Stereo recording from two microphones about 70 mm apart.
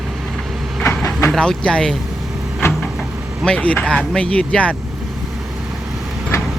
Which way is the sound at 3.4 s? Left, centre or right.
Centre.